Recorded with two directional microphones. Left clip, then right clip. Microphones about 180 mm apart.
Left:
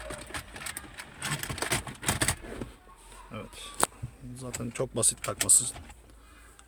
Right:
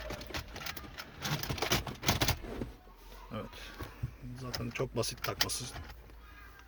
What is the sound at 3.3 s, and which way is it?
Speech, 10° left (ahead or behind).